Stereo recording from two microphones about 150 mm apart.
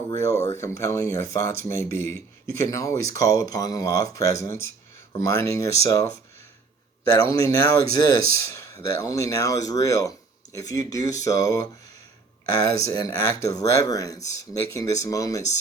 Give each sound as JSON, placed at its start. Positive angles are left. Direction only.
{"t": 0.2, "sound": "speech", "side_deg": 20}
{"t": 7.2, "sound": "speech", "side_deg": 20}